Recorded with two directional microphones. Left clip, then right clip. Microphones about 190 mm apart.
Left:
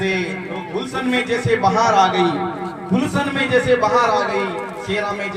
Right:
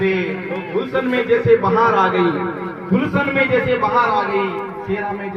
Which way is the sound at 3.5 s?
45° left (ahead or behind).